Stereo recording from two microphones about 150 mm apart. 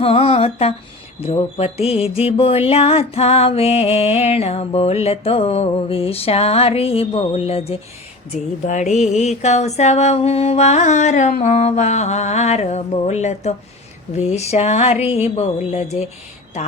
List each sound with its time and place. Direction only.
0.0 s music: 40° left (ahead or behind)
8.6 s music: 50° left (ahead or behind)